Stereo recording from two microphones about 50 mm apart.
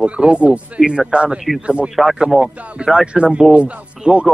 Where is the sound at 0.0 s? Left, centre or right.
Right.